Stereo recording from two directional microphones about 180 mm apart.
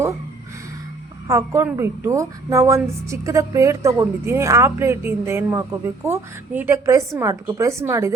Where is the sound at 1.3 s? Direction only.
15° right (ahead or behind).